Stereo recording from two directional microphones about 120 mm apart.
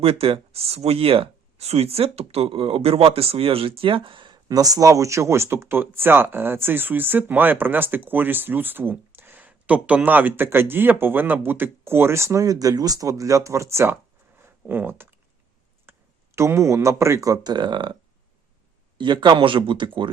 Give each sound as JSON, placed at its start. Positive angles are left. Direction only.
{"t": 0.0, "sound": "speech", "side_deg": -50}
{"t": 18.9, "sound": "speech", "side_deg": -40}